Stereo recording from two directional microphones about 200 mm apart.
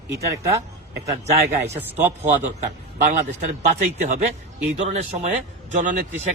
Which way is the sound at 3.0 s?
35° right (ahead or behind).